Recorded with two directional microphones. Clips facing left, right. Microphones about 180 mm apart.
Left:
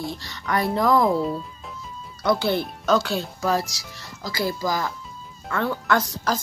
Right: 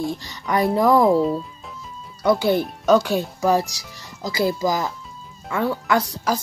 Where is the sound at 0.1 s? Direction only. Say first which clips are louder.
Right 3 dB; 15° right (ahead or behind).